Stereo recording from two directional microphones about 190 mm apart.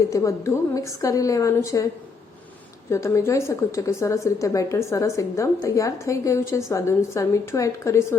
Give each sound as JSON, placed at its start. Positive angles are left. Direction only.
{"t": 0.1, "sound": "speech", "side_deg": 15}
{"t": 2.9, "sound": "speech", "side_deg": 15}